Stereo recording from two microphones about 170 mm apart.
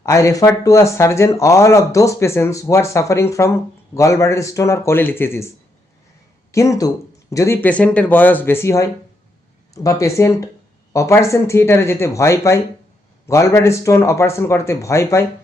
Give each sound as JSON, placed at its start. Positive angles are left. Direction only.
{"t": 0.0, "sound": "speech", "side_deg": 20}
{"t": 6.5, "sound": "speech", "side_deg": 15}